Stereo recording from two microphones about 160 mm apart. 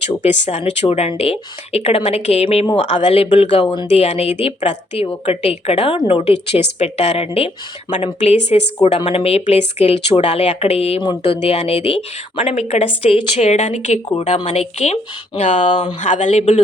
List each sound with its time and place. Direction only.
0.1 s a woman's voice: 45° left (ahead or behind)